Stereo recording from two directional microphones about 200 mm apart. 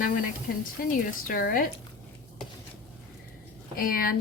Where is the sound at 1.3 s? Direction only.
45° left (ahead or behind).